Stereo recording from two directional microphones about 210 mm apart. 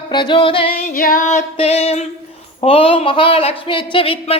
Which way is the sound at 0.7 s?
45° left (ahead or behind).